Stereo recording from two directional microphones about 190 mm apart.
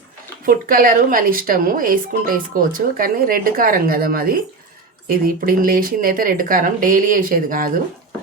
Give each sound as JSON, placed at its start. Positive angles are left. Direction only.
{"t": 0.4, "sound": "speech", "side_deg": -50}